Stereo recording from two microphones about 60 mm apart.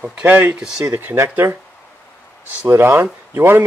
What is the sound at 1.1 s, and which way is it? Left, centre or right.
Speech, right.